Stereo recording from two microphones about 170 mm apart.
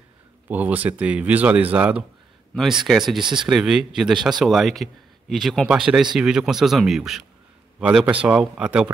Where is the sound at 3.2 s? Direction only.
25° right (ahead or behind).